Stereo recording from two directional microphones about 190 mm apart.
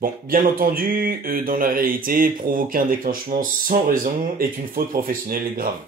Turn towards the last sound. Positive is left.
turn(degrees=-50)  # may be behind; listen again after turning